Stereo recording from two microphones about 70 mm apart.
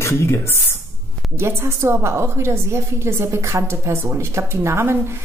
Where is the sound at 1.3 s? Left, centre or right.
Right.